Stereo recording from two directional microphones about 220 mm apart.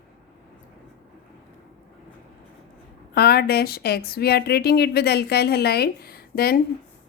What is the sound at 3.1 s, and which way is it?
A woman's voice, 45° left (ahead or behind).